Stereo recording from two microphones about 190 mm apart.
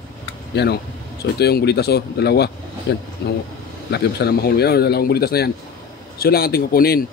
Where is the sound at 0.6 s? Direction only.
65° left (ahead or behind).